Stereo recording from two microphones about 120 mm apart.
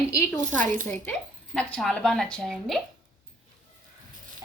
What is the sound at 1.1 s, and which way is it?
Speech, 10° left (ahead or behind).